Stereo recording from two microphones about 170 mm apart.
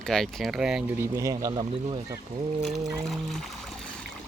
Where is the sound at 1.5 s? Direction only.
30° right (ahead or behind).